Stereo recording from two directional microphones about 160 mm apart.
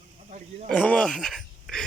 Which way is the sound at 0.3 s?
50° right (ahead or behind).